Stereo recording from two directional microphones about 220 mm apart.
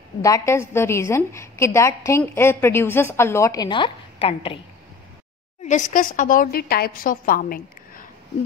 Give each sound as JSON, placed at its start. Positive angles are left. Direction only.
{"t": 0.2, "sound": "a woman's voice", "side_deg": 15}
{"t": 5.6, "sound": "a woman's voice", "side_deg": 30}